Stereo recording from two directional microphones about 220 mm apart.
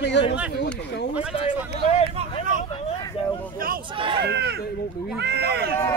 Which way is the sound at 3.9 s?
25° right (ahead or behind).